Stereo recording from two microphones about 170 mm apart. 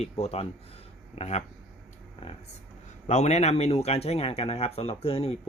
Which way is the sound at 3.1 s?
40° left (ahead or behind).